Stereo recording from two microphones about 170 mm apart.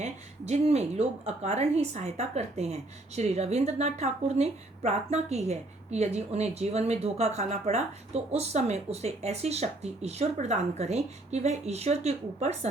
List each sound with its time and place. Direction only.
0.0 s a woman's voice: 40° right (ahead or behind)